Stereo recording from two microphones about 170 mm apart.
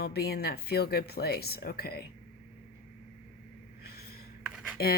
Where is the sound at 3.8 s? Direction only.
60° left (ahead or behind).